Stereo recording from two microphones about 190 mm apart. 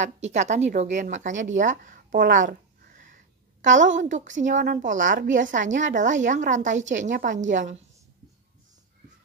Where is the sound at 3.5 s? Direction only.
40° right (ahead or behind).